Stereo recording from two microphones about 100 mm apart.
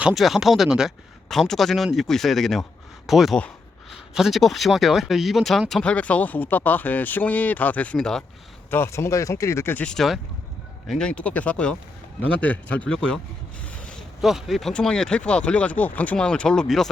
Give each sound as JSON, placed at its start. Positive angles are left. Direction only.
{"t": 0.1, "sound": "a man's voice", "side_deg": 0}
{"t": 8.7, "sound": "speech", "side_deg": 25}
{"t": 9.8, "sound": "a man's voice", "side_deg": 5}
{"t": 13.7, "sound": "zipper", "side_deg": 10}
{"t": 14.2, "sound": "speech", "side_deg": -5}